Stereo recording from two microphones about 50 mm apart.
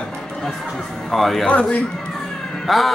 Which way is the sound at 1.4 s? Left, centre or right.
Left.